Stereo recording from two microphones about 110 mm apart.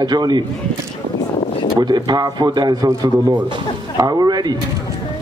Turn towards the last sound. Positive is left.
turn(degrees=-40)  # may be behind; listen again after turning